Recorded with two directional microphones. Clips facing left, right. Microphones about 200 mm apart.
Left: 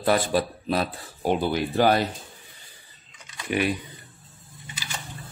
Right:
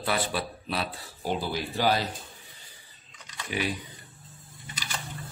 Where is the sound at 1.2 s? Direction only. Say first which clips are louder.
Left 7 dB; 60° left (ahead or behind).